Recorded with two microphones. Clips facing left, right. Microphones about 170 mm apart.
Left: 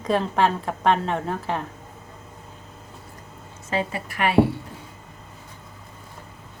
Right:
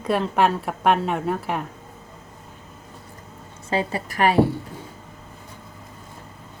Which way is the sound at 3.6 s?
35° right (ahead or behind).